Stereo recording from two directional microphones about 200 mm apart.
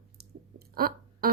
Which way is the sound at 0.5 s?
50° right (ahead or behind).